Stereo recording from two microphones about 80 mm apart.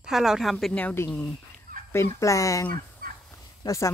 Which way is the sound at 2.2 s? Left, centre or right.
Left.